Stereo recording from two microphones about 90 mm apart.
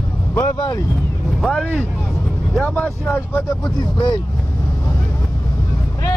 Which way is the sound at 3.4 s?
50° left (ahead or behind).